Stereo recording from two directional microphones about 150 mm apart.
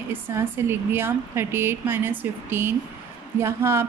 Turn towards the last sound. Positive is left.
turn(degrees=-15)  # may be behind; listen again after turning